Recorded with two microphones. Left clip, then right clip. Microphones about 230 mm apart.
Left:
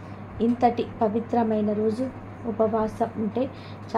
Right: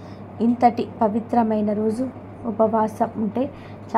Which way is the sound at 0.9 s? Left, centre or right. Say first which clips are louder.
Right 3 dB; right.